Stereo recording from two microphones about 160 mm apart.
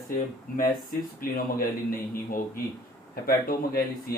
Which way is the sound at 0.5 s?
60° left (ahead or behind).